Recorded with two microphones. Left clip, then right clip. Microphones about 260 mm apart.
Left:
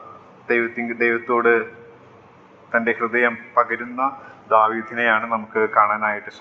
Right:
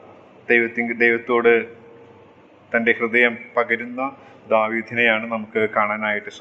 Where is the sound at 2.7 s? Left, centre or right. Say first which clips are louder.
Right 1 dB; right.